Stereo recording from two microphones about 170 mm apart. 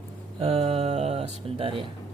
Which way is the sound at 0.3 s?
35° right (ahead or behind).